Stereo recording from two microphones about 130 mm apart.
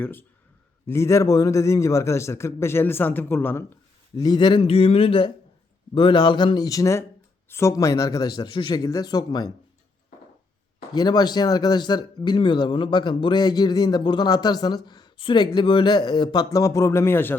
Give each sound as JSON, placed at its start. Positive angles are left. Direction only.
{"t": 0.0, "sound": "a man's voice", "side_deg": 15}
{"t": 4.2, "sound": "a man's voice", "side_deg": 35}
{"t": 10.9, "sound": "speech", "side_deg": 30}